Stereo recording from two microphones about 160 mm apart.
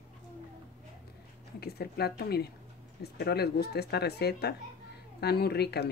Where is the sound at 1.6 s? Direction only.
80° left.